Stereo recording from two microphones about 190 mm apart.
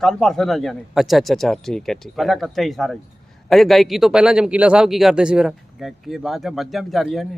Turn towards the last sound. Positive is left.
turn(degrees=0)  # may be behind; listen again after turning